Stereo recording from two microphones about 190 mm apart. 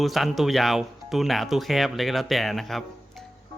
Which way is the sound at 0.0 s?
Centre (ahead or behind).